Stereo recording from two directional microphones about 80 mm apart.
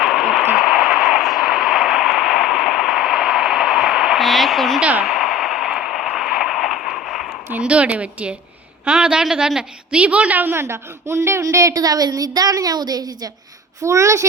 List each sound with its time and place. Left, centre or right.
0.0 s radio: centre
4.8 s speech: centre
5.0 s a sound: centre
7.5 s a woman's voice: centre; by 13.3 s right
13.8 s a woman's voice: right